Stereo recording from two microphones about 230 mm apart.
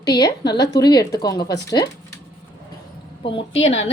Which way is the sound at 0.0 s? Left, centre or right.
Centre.